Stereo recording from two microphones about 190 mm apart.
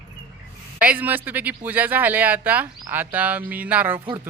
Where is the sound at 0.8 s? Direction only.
10° right (ahead or behind).